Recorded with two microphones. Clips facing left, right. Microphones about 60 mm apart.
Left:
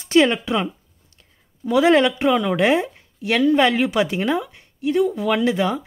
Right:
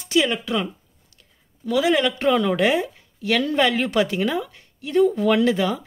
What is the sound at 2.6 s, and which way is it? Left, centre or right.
Speech, left.